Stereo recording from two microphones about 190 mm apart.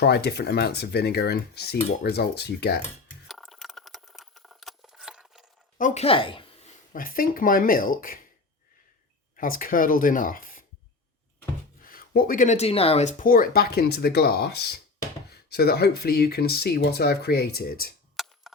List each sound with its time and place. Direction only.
0.0 s speech: 60° left (ahead or behind)
3.2 s a sound: centre (ahead or behind)
5.7 s speech: 40° left (ahead or behind)
6.9 s speech: 50° left (ahead or behind)
9.3 s speech: 45° left (ahead or behind)
11.8 s speech: 50° left (ahead or behind)
18.2 s cap gun: centre (ahead or behind)